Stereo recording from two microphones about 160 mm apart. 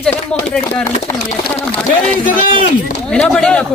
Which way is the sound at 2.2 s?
60° left (ahead or behind).